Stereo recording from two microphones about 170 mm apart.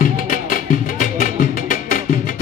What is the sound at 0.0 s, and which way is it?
Music, 50° left (ahead or behind).